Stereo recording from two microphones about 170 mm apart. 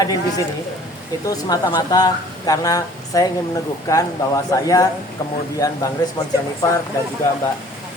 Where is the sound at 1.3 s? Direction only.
25° left (ahead or behind).